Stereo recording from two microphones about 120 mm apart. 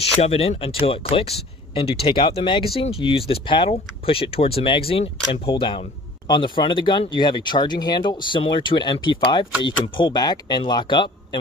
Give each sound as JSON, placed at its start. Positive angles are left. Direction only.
{"t": 0.2, "sound": "speech", "side_deg": 55}